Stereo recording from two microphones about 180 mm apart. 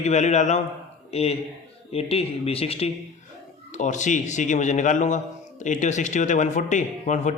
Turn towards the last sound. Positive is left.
turn(degrees=40)  # may be behind; listen again after turning